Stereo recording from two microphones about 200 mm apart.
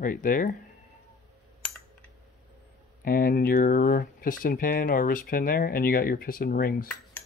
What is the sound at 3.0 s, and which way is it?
Speech, 45° left (ahead or behind).